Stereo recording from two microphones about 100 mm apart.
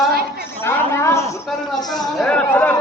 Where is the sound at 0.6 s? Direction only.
25° left (ahead or behind).